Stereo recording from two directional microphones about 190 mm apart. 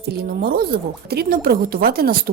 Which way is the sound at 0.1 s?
55° right (ahead or behind).